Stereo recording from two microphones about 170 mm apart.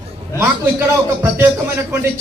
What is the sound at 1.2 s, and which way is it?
Speech, 15° right (ahead or behind).